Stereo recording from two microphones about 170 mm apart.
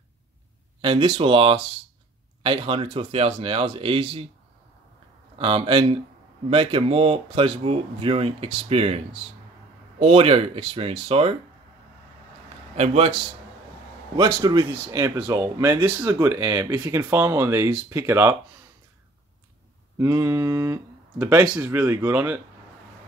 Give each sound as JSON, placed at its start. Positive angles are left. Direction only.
{"t": 0.8, "sound": "speech", "side_deg": -30}
{"t": 5.4, "sound": "speech", "side_deg": -35}
{"t": 12.7, "sound": "speech", "side_deg": -40}
{"t": 14.1, "sound": "speech", "side_deg": -25}
{"t": 20.0, "sound": "speech", "side_deg": -15}